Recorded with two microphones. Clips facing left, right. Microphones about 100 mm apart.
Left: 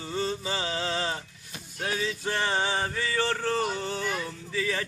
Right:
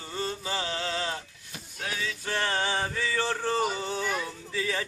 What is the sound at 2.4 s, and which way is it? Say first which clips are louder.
Music: left 1 dB; 10° left (ahead or behind).